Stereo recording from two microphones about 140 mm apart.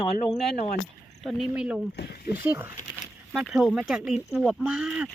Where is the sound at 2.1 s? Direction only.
90° left.